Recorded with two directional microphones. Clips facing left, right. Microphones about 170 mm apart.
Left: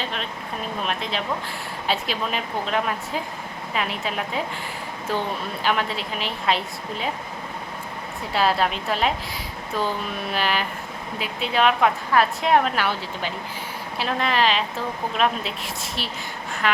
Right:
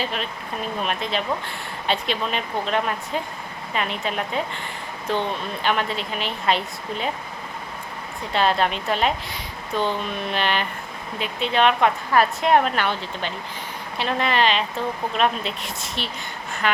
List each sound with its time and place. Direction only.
0.0 s speech: 5° right (ahead or behind)
5.6 s speech: centre (ahead or behind)
8.3 s speech: 5° left (ahead or behind)